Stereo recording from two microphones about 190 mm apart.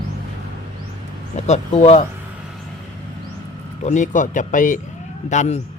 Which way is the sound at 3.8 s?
40° left (ahead or behind).